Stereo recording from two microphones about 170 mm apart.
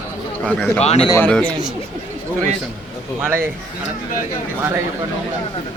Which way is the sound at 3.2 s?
15° right (ahead or behind).